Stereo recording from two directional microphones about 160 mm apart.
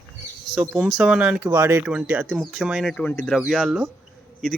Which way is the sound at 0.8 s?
5° right (ahead or behind).